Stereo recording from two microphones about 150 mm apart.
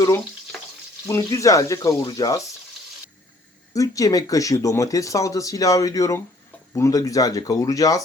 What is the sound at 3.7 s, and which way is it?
Speech, 20° left (ahead or behind).